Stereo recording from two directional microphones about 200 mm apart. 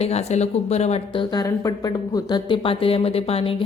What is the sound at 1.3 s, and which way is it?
Speech, 15° left (ahead or behind).